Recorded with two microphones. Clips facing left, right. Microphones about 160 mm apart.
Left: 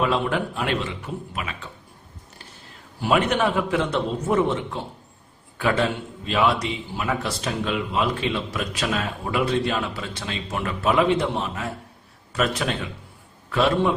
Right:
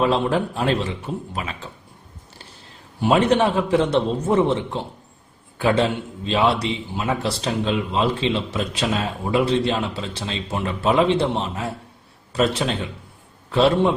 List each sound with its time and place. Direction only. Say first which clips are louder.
0.0 s a man's voice: right 3 dB; 30° right (ahead or behind)
3.0 s a man's voice: right 4 dB; 30° right (ahead or behind)